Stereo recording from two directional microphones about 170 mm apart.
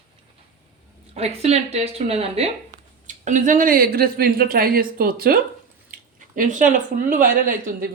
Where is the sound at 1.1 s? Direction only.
35° right (ahead or behind).